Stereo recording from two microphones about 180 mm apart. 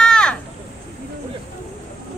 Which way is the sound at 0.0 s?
5° left (ahead or behind).